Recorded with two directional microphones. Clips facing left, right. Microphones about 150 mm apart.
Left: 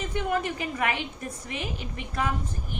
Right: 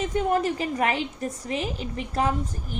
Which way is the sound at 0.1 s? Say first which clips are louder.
Right 3 dB; 40° right (ahead or behind).